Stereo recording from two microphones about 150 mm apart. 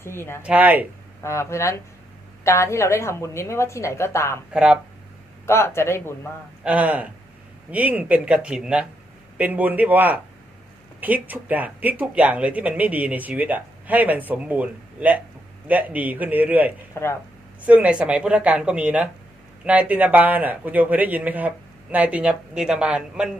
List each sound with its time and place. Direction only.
0.0 s speech: 15° left (ahead or behind)
0.4 s speech: 10° right (ahead or behind)
1.2 s a woman's voice: 20° left (ahead or behind)
4.5 s speech: 5° right (ahead or behind)
5.5 s speech: 15° left (ahead or behind)
6.7 s speech: 10° right (ahead or behind)
16.9 s speech: 15° left (ahead or behind)
17.7 s speech: 10° right (ahead or behind)